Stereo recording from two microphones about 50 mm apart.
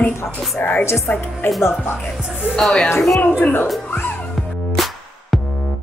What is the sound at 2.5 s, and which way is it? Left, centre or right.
Speech, centre.